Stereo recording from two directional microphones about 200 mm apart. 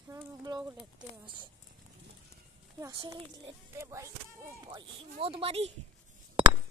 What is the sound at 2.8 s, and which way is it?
Speech, 15° right (ahead or behind).